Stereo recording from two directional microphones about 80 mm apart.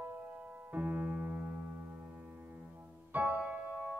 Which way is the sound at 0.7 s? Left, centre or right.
Right.